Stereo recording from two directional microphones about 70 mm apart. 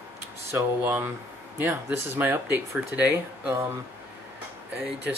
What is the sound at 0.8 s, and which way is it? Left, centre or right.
Speech, right.